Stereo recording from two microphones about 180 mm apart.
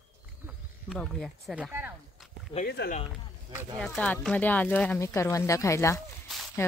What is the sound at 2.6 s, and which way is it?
Speech, 65° left (ahead or behind).